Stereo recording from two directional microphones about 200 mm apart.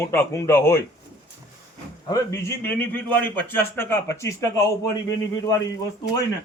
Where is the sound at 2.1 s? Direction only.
15° left (ahead or behind).